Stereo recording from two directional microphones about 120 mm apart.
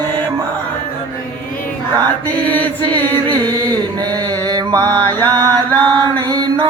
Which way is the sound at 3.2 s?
35° right (ahead or behind).